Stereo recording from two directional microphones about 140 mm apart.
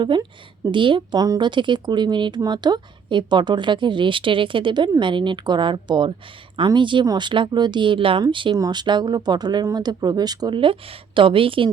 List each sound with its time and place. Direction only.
0.0 s a woman's voice: 30° right (ahead or behind)